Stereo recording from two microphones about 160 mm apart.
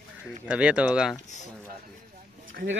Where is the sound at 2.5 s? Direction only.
65° right (ahead or behind).